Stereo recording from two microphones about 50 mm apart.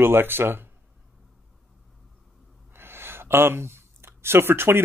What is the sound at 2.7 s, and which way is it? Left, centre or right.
Speech, right.